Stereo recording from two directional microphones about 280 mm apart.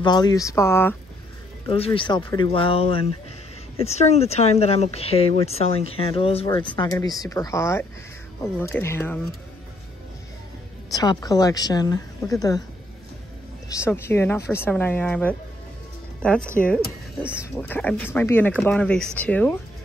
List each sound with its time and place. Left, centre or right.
0.0 s speech: centre
10.9 s speech: centre
13.7 s speech: centre